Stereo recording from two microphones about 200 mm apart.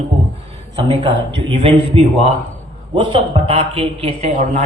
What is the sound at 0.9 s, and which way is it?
A man's voice, 25° right (ahead or behind).